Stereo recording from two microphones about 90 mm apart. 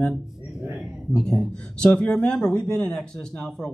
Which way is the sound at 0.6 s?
10° right (ahead or behind).